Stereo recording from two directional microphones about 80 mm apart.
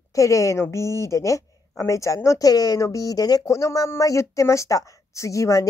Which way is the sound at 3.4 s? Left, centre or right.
Left.